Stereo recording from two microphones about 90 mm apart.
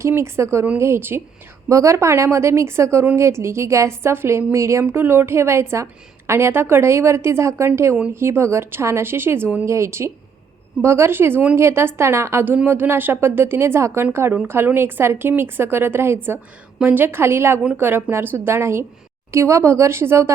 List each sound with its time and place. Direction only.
0.0 s a woman's voice: 30° right (ahead or behind)
9.6 s a woman's voice: 30° right (ahead or behind)